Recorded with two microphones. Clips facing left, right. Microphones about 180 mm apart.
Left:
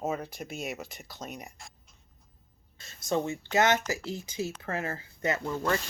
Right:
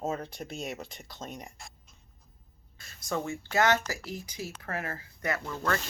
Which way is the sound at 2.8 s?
25° left (ahead or behind).